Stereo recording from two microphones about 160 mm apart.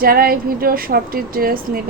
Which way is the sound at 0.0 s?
65° right (ahead or behind).